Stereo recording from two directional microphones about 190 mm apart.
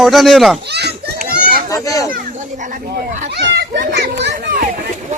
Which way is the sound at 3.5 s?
55° right (ahead or behind).